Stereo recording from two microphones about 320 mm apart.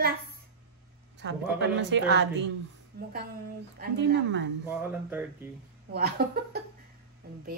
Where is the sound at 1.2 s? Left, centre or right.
Right.